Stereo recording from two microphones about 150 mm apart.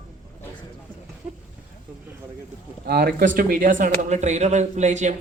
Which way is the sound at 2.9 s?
90° right.